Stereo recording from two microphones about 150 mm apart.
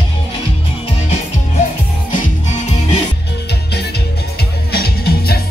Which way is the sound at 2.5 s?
50° left (ahead or behind).